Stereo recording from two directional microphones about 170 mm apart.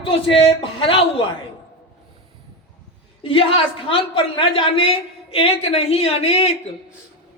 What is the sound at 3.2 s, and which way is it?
Speech, 30° left (ahead or behind).